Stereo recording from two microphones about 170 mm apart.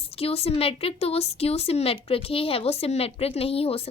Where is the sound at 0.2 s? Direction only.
35° left (ahead or behind).